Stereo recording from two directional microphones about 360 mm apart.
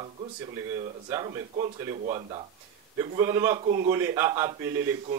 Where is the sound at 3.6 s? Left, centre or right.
Centre.